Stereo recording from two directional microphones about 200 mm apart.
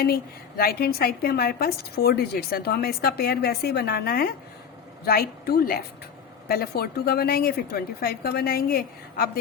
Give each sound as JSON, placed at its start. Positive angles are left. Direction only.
{"t": 0.0, "sound": "a woman's voice", "side_deg": 50}